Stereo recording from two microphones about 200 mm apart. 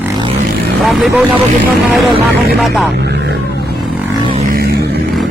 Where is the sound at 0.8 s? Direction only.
Centre (ahead or behind).